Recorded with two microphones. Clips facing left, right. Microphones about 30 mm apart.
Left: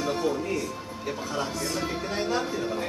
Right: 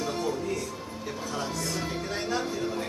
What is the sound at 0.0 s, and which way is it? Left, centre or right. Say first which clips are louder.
Music: left 3 dB; centre.